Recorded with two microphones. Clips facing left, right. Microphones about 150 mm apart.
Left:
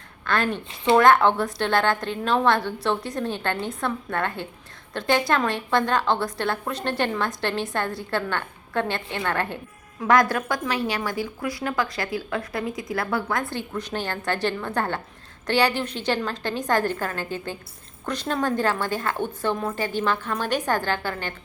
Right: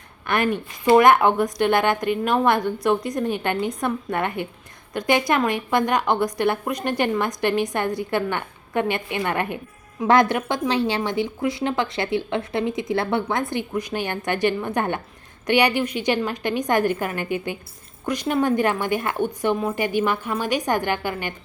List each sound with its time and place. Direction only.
0.3 s a woman's voice: 15° right (ahead or behind)